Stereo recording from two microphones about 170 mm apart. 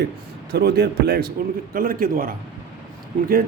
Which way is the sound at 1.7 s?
60° right (ahead or behind).